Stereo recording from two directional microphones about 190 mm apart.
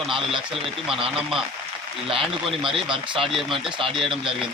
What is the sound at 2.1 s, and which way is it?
Speech, 30° right (ahead or behind).